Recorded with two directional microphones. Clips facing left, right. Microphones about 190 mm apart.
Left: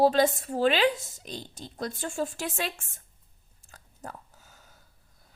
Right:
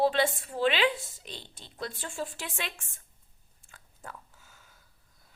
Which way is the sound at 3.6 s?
40° left (ahead or behind).